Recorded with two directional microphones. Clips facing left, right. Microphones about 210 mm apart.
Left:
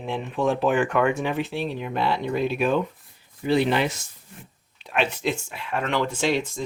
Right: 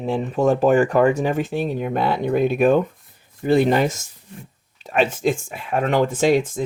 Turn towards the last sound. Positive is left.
turn(degrees=-50)  # may be behind; listen again after turning